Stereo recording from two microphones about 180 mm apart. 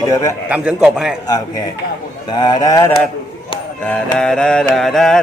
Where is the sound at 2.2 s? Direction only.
25° left (ahead or behind).